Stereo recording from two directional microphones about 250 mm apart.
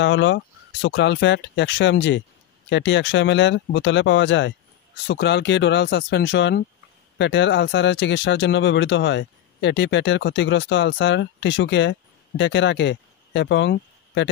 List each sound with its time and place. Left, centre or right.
0.0 s speech: left